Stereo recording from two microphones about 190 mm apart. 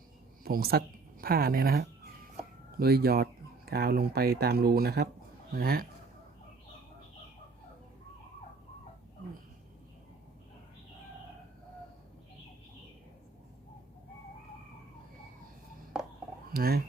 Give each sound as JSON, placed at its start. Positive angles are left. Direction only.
{"t": 0.4, "sound": "a woman's voice", "side_deg": -50}
{"t": 16.5, "sound": "speech", "side_deg": -55}